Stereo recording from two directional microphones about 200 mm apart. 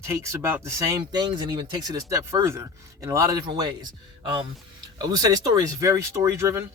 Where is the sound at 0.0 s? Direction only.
15° right (ahead or behind).